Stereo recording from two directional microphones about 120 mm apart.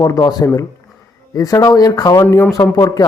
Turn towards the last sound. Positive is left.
turn(degrees=30)  # may be behind; listen again after turning